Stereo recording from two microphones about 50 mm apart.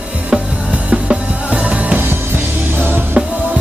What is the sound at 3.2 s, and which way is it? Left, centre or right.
Music, right.